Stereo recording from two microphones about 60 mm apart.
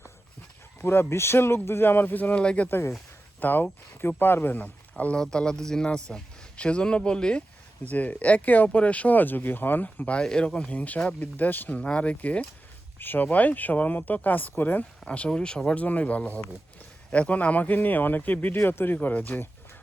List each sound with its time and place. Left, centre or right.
0.8 s speech: left
2.4 s speech: centre
2.6 s speech: left
5.1 s speech: centre
7.9 s speech: left
11.8 s speech: centre
13.0 s speech: left
15.0 s speech: left